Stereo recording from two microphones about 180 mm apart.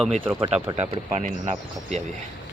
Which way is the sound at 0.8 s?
40° right (ahead or behind).